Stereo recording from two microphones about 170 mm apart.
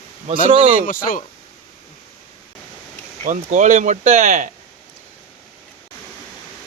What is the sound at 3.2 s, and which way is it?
Speech, 45° right (ahead or behind).